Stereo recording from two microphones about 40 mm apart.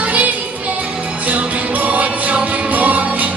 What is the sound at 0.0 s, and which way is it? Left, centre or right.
Music, right.